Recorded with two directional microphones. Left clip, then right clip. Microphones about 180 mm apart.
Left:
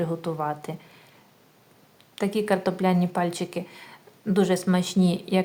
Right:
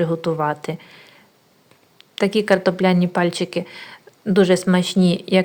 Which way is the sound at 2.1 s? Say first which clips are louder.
Right 8 dB; 20° right (ahead or behind).